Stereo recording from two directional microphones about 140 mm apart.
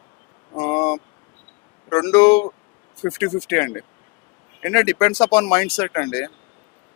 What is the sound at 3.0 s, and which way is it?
Speech, 20° left (ahead or behind).